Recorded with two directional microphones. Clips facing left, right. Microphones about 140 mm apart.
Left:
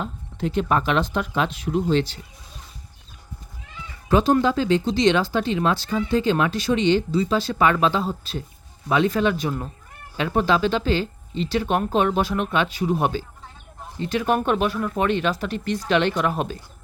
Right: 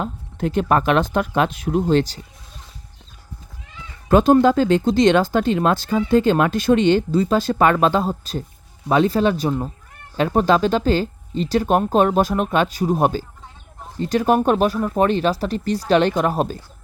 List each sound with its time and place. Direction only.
0.0 s speech: 50° right (ahead or behind)
4.1 s speech: 50° right (ahead or behind)